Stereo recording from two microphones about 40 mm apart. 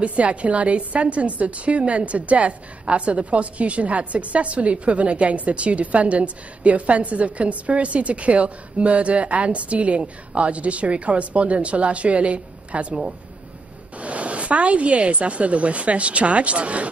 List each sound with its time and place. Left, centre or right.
0.0 s a woman's voice: right